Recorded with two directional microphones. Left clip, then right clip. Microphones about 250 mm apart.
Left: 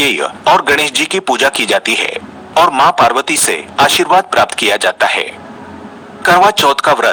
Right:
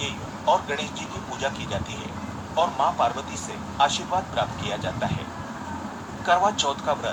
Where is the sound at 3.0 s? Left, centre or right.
Left.